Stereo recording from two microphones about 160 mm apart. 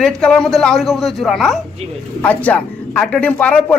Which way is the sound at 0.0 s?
5° left (ahead or behind).